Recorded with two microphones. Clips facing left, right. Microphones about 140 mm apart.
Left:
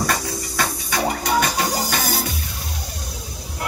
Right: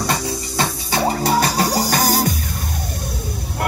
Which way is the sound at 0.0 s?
25° right (ahead or behind).